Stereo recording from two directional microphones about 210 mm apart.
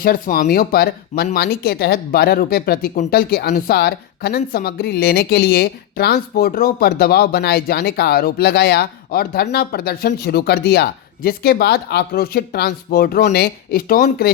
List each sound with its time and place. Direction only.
0.0 s speech: 45° left (ahead or behind)